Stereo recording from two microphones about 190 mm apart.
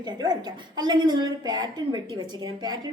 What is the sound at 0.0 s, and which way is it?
A woman's voice, 20° right (ahead or behind).